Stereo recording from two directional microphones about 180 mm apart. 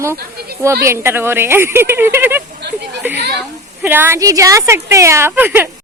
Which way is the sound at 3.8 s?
10° right (ahead or behind).